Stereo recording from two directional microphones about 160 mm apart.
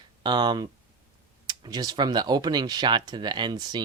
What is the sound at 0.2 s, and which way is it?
Speech, 30° right (ahead or behind).